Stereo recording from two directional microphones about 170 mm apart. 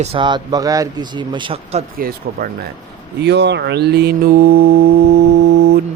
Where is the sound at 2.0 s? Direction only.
60° right (ahead or behind).